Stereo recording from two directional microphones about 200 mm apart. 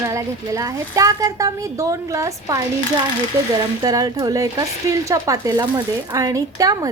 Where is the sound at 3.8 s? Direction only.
20° right (ahead or behind).